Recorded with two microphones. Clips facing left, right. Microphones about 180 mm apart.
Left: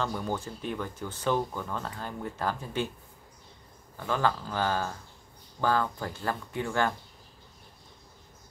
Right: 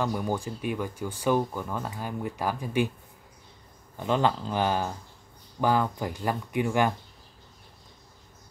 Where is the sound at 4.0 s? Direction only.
20° right (ahead or behind).